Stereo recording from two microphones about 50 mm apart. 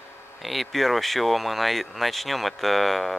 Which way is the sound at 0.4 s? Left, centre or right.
Centre.